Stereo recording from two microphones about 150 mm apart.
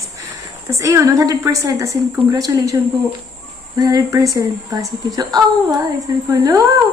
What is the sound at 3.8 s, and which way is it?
A woman's voice, 25° right (ahead or behind).